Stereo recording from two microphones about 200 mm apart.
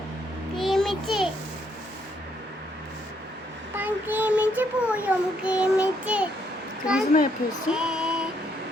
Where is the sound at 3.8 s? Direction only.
10° right (ahead or behind).